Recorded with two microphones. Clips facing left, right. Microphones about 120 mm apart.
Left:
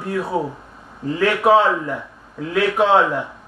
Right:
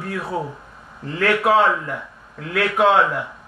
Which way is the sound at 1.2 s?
25° left (ahead or behind).